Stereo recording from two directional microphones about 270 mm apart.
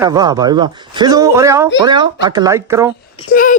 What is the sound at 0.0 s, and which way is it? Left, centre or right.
Speech, centre.